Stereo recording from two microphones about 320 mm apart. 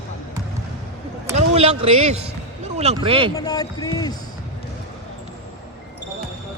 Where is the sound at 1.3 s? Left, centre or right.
Centre.